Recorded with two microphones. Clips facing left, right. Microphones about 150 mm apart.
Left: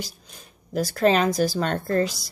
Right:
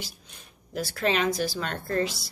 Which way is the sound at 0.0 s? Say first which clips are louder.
Left 5 dB; 40° left (ahead or behind).